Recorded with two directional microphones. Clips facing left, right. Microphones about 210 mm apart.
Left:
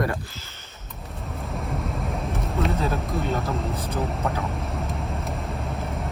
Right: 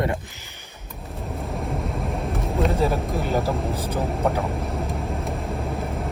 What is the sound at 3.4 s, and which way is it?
Speech, 30° right (ahead or behind).